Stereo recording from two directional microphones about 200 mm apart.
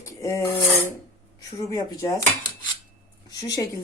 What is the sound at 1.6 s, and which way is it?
Speech, 15° left (ahead or behind).